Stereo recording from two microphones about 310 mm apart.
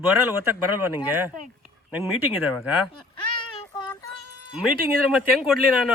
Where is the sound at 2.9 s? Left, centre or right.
Centre.